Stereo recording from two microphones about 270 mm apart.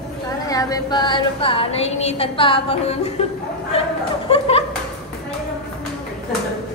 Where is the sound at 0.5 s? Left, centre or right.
Centre.